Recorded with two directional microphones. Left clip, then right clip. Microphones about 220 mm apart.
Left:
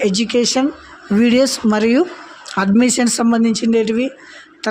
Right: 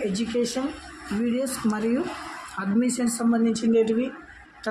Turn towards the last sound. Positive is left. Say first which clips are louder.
# left 6 dB
turn(degrees=40)  # may be behind; listen again after turning